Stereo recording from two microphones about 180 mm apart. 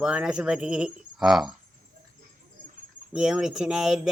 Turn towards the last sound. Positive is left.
turn(degrees=-5)  # may be behind; listen again after turning